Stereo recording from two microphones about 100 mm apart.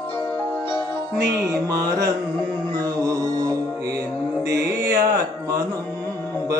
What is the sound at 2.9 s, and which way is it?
Music, 35° right (ahead or behind).